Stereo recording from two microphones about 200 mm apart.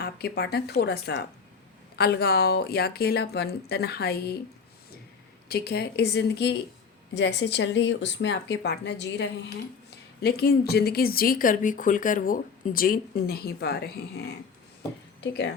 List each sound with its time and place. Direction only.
0.0 s speech: 50° left (ahead or behind)
5.5 s speech: 50° left (ahead or behind)